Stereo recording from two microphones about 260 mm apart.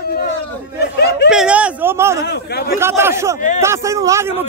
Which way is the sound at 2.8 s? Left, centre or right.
Centre.